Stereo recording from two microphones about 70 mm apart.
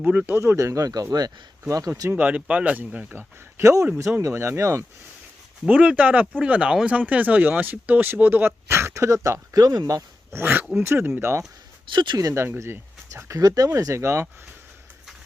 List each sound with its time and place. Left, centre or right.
0.0 s speech: right
0.3 s speech: right
2.0 s speech: right
3.6 s speech: right
5.6 s speech: centre; by 10.0 s right
10.3 s speech: right
11.9 s speech: right
12.3 s speech: right
13.3 s speech: right
13.7 s speech: right